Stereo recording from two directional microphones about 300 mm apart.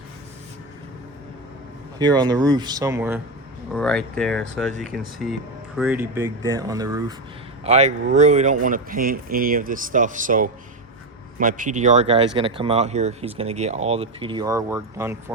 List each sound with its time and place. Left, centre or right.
2.0 s speech: centre
7.6 s speech: right